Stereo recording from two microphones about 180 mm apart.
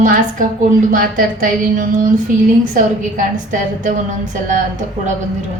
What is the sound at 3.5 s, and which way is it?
Speech, 45° right (ahead or behind).